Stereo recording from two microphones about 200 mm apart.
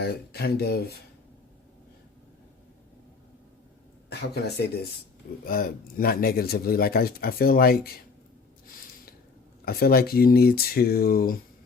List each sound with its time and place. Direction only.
0.0 s speech: 55° left (ahead or behind)
4.1 s speech: 55° left (ahead or behind)
9.6 s speech: 50° left (ahead or behind)